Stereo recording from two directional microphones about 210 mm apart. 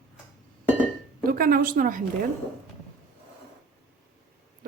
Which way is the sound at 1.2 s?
45° right (ahead or behind).